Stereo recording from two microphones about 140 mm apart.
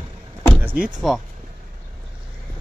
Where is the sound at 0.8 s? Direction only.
Centre (ahead or behind).